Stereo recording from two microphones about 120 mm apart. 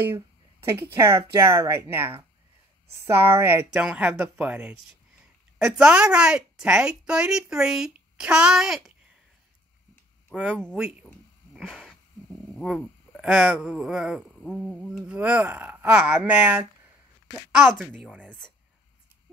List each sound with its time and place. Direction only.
0.1 s a woman's voice: 20° right (ahead or behind); by 8.9 s 5° right (ahead or behind)
10.3 s speech: 10° right (ahead or behind)
11.5 s wheeze: centre (ahead or behind)
13.1 s a woman's voice: centre (ahead or behind)
14.4 s speech: 15° left (ahead or behind)
14.9 s a woman's voice: 10° right (ahead or behind)